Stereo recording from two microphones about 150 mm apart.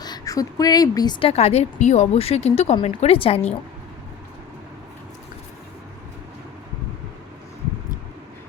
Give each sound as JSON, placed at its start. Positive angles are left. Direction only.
{"t": 0.0, "sound": "a woman's voice", "side_deg": 25}
{"t": 1.3, "sound": "a woman's voice", "side_deg": 45}